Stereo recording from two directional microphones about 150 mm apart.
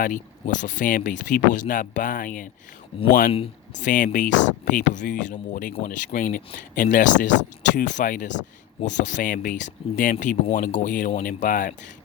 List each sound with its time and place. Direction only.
0.0 s speech: 60° left (ahead or behind)
2.9 s speech: 35° left (ahead or behind)
3.8 s speech: 60° left (ahead or behind)